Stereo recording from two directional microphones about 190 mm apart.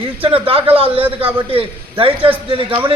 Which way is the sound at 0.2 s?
30° right (ahead or behind).